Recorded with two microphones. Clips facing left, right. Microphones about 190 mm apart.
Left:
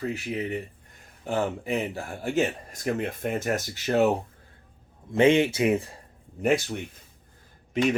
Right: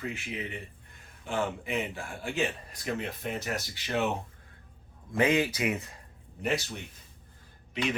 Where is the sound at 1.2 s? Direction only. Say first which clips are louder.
Left 4 dB; 40° left (ahead or behind).